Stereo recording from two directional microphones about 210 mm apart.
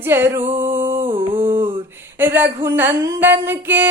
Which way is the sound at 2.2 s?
10° right (ahead or behind).